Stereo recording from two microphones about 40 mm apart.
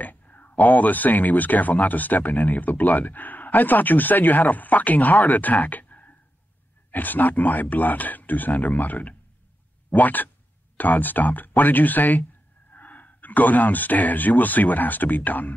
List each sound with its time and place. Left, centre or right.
0.0 s speech: left